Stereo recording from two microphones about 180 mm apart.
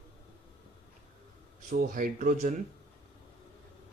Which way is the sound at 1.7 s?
45° right (ahead or behind).